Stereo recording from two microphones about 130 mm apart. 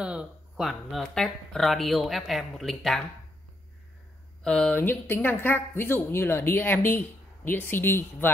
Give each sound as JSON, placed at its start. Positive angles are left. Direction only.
{"t": 0.0, "sound": "speech", "side_deg": -5}
{"t": 4.4, "sound": "speech", "side_deg": 5}